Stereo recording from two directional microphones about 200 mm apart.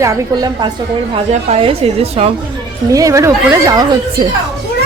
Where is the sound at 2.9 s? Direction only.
15° right (ahead or behind).